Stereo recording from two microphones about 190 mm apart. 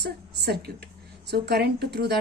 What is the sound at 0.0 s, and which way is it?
Speech, 60° right (ahead or behind).